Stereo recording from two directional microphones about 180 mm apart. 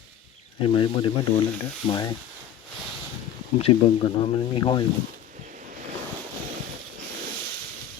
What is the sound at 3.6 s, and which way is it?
Speech, 30° left (ahead or behind).